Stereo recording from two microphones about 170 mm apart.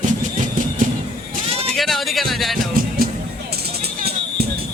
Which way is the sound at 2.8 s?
60° right (ahead or behind).